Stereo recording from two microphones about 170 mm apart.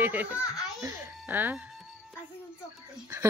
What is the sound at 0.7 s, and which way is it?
Babbling, 15° right (ahead or behind).